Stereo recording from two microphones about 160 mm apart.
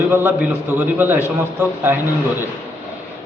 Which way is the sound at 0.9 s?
15° right (ahead or behind).